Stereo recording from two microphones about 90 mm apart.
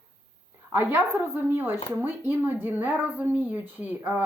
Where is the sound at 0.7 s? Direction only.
25° right (ahead or behind).